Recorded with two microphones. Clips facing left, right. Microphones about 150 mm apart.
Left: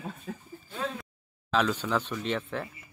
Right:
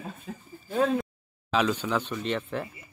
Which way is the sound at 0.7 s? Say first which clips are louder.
Right 10 dB; 50° right (ahead or behind).